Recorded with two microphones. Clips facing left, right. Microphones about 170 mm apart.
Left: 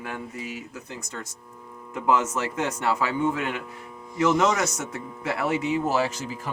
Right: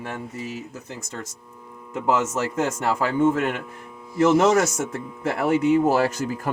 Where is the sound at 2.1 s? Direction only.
45° right (ahead or behind).